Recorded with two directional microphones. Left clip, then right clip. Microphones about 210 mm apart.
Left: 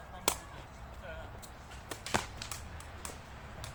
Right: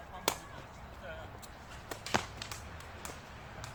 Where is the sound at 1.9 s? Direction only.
5° left (ahead or behind).